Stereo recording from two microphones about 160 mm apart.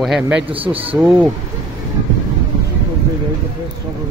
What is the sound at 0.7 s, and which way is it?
Speech, 35° right (ahead or behind).